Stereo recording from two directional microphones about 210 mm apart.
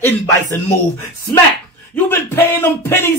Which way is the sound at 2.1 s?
10° left (ahead or behind).